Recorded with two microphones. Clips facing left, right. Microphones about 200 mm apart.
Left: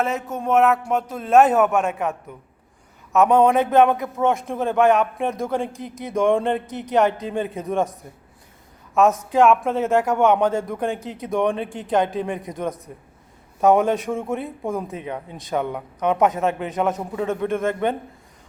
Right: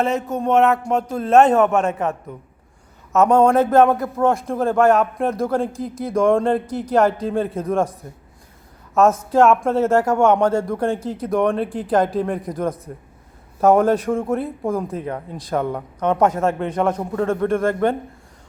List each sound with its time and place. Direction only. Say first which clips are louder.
0.0 s a man's voice: right 4 dB; centre (ahead or behind)
3.1 s a man's voice: right 1 dB; centre (ahead or behind)
9.0 s a man's voice: right 2 dB; centre (ahead or behind)
17.5 s a man's voice: right 3 dB; 20° left (ahead or behind)